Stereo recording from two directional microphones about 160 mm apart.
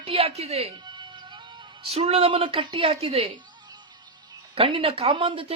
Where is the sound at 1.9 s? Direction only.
40° right (ahead or behind).